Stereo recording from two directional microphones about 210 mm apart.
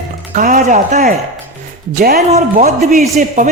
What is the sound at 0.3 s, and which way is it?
Speech, 40° right (ahead or behind).